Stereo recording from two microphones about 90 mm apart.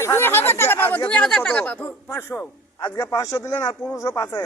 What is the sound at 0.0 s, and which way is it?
Speech, 25° left (ahead or behind).